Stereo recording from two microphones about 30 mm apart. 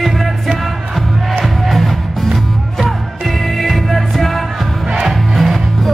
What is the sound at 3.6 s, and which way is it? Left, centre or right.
Music, centre.